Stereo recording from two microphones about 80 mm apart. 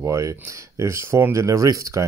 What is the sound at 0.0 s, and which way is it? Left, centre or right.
Speech, right.